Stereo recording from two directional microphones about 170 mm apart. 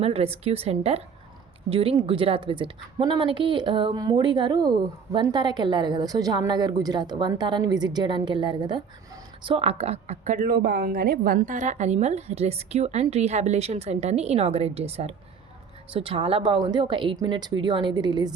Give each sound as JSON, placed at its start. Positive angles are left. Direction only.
{"t": 0.0, "sound": "a woman's voice", "side_deg": -35}